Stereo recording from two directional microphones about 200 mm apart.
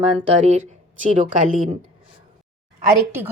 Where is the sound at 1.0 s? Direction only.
40° right (ahead or behind).